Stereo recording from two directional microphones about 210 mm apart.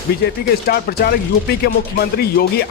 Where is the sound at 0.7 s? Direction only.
45° left (ahead or behind).